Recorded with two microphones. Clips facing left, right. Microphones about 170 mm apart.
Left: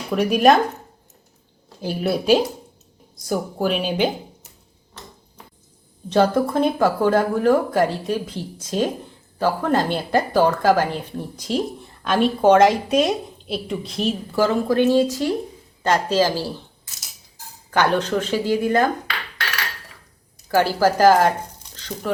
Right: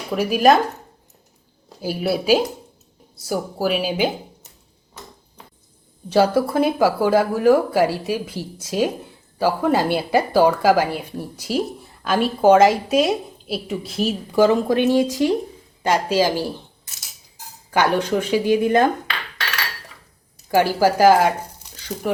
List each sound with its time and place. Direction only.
0.1 s speech: centre (ahead or behind)
1.8 s speech: 5° right (ahead or behind)
6.1 s a woman's voice: 10° right (ahead or behind)
14.3 s a woman's voice: 20° right (ahead or behind)
17.7 s a woman's voice: 10° right (ahead or behind)
20.5 s speech: 15° right (ahead or behind)